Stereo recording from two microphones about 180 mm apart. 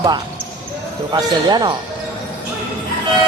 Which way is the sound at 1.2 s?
25° right (ahead or behind).